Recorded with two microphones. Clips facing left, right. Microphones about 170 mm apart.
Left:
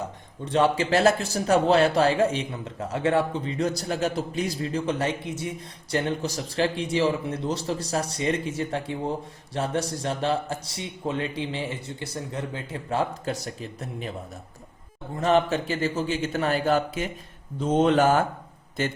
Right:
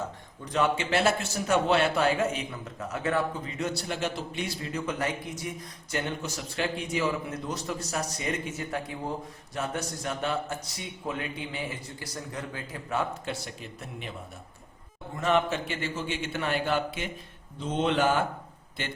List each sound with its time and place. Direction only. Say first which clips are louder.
0.4 s a man's voice: left 5 dB; 30° left (ahead or behind)
15.1 s a man's voice: left 4 dB; 35° left (ahead or behind)